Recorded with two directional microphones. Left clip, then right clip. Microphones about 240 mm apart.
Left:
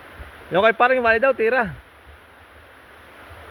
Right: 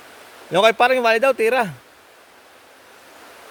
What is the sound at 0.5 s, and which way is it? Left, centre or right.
Speech, centre.